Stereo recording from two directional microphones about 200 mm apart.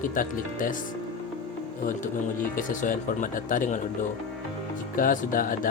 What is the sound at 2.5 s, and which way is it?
Speech, 40° left (ahead or behind).